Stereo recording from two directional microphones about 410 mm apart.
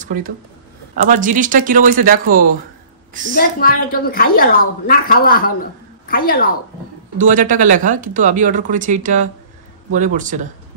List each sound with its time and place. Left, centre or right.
0.0 s speech: centre
3.3 s a woman's voice: centre
7.2 s speech: centre